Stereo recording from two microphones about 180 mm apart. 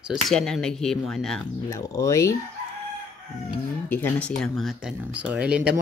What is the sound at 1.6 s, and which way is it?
Speech, 15° left (ahead or behind).